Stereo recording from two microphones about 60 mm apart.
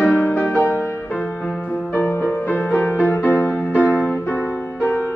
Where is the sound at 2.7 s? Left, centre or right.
Left.